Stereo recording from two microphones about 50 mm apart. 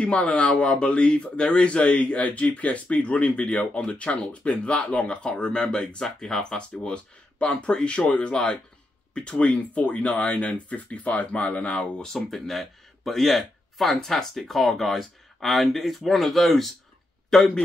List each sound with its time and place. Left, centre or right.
0.0 s speech: left
12.0 s a man's voice: centre